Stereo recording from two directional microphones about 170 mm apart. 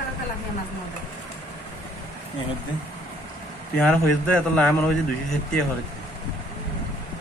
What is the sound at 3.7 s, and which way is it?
Speech, 5° left (ahead or behind).